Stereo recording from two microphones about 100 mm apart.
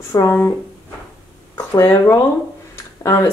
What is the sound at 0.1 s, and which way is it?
Speech, 35° left (ahead or behind).